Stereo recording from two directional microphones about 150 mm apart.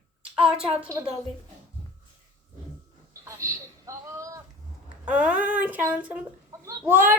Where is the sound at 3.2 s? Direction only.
20° right (ahead or behind).